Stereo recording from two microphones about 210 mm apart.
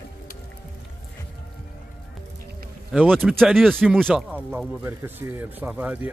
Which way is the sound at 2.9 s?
5° right (ahead or behind).